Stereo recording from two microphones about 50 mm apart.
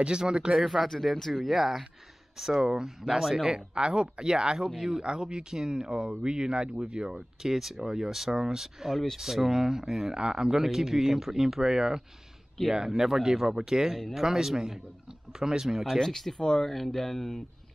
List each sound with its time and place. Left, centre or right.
0.0 s speech: centre
0.6 s speech: centre
0.8 s speech: centre
16.0 s speech: centre